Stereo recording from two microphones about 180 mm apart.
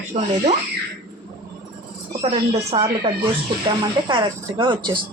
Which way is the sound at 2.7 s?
35° right (ahead or behind).